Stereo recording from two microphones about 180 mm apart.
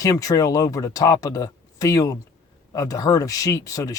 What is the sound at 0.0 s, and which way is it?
Speech, 20° left (ahead or behind).